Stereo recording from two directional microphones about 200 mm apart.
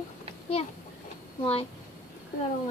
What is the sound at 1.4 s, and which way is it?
Speech, 30° left (ahead or behind).